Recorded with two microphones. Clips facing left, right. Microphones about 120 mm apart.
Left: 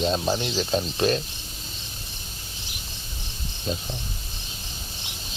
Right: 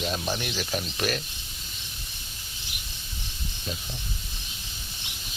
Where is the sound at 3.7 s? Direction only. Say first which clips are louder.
Left 7 dB; 30° left (ahead or behind).